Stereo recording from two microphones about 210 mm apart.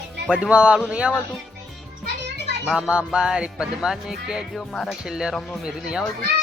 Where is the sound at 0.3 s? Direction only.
5° right (ahead or behind).